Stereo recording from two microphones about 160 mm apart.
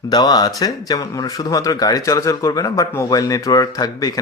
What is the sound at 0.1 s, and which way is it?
Speech, 25° left (ahead or behind).